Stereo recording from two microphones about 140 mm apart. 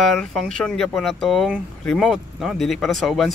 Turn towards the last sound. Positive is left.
turn(degrees=0)  # may be behind; listen again after turning